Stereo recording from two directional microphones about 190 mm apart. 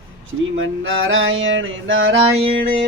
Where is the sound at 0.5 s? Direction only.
85° right.